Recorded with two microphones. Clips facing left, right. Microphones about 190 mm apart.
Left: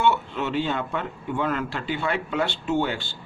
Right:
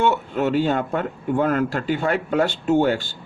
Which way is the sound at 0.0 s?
45° right (ahead or behind).